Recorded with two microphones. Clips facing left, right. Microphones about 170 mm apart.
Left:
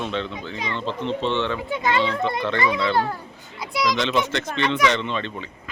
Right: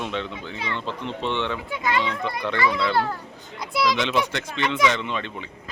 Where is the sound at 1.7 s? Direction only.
25° left (ahead or behind).